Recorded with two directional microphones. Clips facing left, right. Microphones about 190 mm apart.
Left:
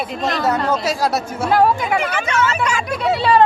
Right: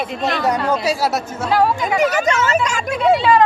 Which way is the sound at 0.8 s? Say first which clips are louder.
Right 1 dB; 10° right (ahead or behind).